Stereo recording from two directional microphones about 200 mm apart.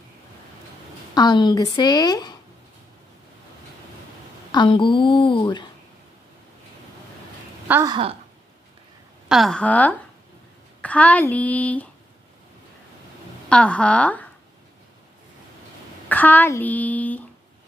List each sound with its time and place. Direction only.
1.1 s a woman's voice: 20° left (ahead or behind)
4.5 s a woman's voice: 25° left (ahead or behind)
7.6 s a woman's voice: 10° right (ahead or behind)
7.9 s speech: 25° right (ahead or behind)
9.3 s a woman's voice: centre (ahead or behind)
13.5 s a woman's voice: 5° left (ahead or behind)
16.1 s a woman's voice: 10° left (ahead or behind)